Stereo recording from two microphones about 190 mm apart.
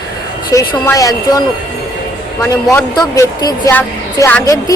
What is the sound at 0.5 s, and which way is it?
Speech, 15° left (ahead or behind).